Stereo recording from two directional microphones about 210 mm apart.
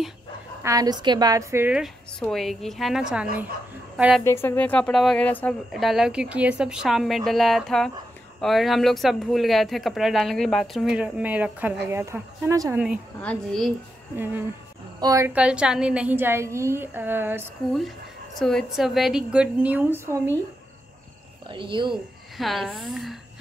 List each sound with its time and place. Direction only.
0.6 s a woman's voice: 15° right (ahead or behind)
4.2 s speech: 10° left (ahead or behind); by 13.0 s 5° right (ahead or behind)
13.2 s speech: 5° left (ahead or behind)
14.1 s a woman's voice: 10° right (ahead or behind)
18.4 s speech: centre (ahead or behind)
21.5 s speech: 25° right (ahead or behind)
22.4 s speech: centre (ahead or behind)